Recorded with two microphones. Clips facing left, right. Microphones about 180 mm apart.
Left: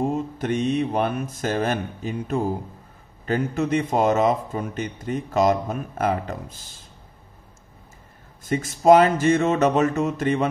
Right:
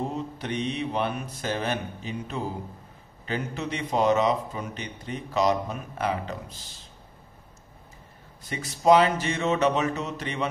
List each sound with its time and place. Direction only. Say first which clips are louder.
0.0 s a man's voice: left 7 dB; 50° left (ahead or behind)
8.5 s a man's voice: left 5 dB; 45° left (ahead or behind)